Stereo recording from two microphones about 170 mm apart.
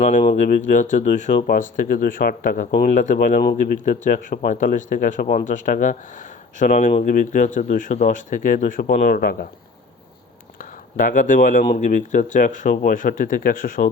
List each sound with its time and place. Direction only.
0.0 s speech: 45° left (ahead or behind); by 9.5 s 60° left (ahead or behind)
10.6 s speech: 50° left (ahead or behind)